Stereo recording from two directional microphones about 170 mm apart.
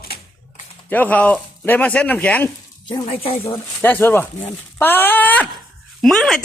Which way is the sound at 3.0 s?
35° left (ahead or behind).